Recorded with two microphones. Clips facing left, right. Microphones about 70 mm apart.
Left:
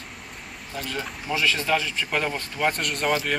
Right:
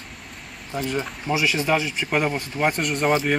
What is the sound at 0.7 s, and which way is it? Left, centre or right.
Speech, right.